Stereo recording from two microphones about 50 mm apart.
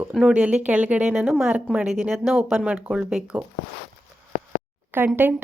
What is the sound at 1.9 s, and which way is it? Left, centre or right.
A woman's voice, centre.